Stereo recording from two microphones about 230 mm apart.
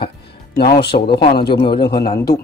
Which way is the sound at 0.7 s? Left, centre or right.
Left.